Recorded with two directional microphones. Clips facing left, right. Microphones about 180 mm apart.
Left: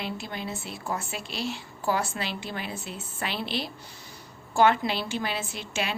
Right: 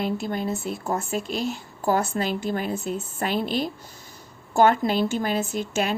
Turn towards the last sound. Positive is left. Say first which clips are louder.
# right 7 dB
turn(degrees=-45)  # may be behind; listen again after turning